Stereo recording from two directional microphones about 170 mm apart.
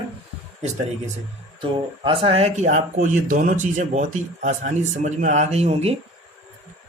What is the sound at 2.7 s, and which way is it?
Speech, 50° right (ahead or behind).